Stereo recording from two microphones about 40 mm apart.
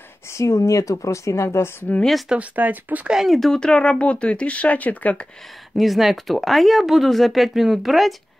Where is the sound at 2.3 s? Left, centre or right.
Right.